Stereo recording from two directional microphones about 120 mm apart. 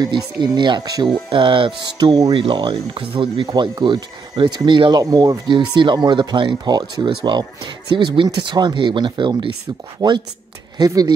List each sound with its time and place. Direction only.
0.0 s speech: 40° right (ahead or behind)
1.3 s speech: 45° right (ahead or behind)